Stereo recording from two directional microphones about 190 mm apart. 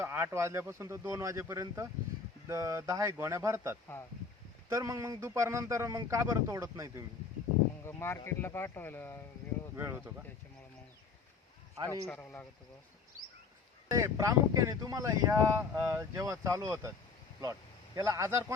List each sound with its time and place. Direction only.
0.0 s speech: 10° right (ahead or behind)
7.9 s speech: 15° left (ahead or behind)
9.7 s speech: 10° right (ahead or behind)
12.0 s speech: 10° left (ahead or behind)
13.9 s speech: 15° right (ahead or behind)